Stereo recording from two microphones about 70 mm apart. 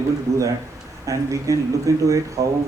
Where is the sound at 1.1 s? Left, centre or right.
Right.